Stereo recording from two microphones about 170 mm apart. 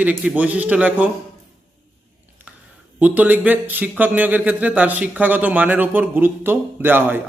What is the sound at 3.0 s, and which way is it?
Speech, 10° right (ahead or behind).